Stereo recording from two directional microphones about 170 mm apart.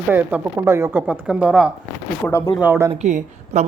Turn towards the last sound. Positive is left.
turn(degrees=-45)  # may be behind; listen again after turning